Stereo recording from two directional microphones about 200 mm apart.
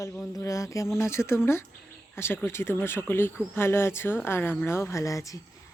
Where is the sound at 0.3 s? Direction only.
15° left (ahead or behind).